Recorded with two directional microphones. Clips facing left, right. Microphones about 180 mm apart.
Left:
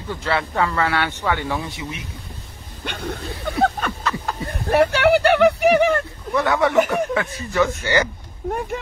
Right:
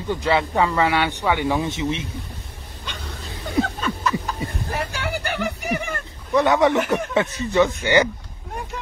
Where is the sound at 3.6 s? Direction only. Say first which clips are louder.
Left 2 dB; 65° left (ahead or behind).